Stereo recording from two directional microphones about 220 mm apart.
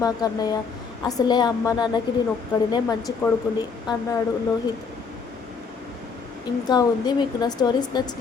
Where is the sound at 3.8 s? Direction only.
20° left (ahead or behind).